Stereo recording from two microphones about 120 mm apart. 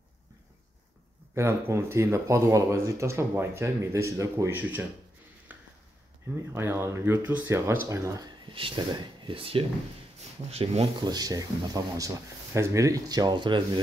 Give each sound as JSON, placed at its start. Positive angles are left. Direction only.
{"t": 1.3, "sound": "speech", "side_deg": -20}
{"t": 5.5, "sound": "a sound", "side_deg": -15}
{"t": 6.5, "sound": "speech", "side_deg": -20}
{"t": 8.5, "sound": "speech", "side_deg": -45}
{"t": 11.0, "sound": "speech", "side_deg": -35}